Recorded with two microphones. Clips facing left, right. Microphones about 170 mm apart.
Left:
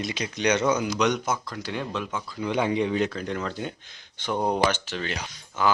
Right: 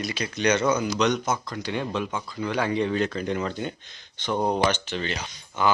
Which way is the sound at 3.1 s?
Centre (ahead or behind).